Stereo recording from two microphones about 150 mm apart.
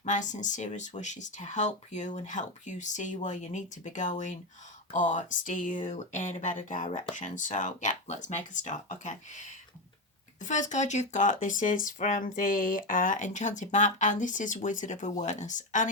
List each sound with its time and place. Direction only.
0.0 s speech: 55° left (ahead or behind)
10.4 s speech: 55° left (ahead or behind)